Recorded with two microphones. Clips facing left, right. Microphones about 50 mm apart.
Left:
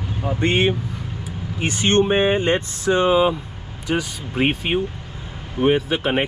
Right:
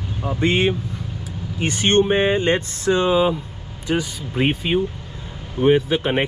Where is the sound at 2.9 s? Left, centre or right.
Left.